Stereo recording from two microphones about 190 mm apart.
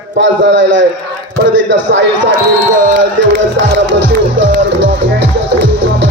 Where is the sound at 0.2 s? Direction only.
75° right (ahead or behind).